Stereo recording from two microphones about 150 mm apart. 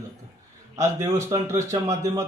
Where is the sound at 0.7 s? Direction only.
20° right (ahead or behind).